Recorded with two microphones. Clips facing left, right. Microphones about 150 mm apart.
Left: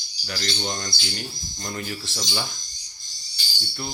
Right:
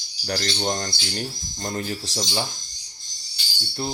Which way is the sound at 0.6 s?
40° right (ahead or behind).